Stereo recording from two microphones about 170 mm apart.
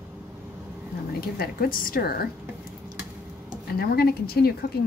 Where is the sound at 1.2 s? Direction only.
60° left (ahead or behind).